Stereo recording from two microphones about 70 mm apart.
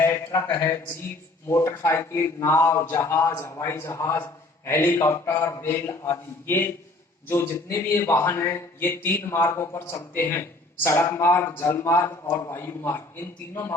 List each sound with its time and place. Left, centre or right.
0.5 s a man's voice: left
4.6 s speech: left
13.5 s a man's voice: left